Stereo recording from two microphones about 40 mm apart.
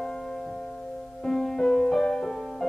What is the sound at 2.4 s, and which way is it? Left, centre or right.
Music, centre.